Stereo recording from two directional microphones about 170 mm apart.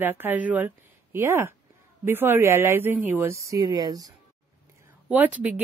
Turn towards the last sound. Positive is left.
turn(degrees=-10)  # may be behind; listen again after turning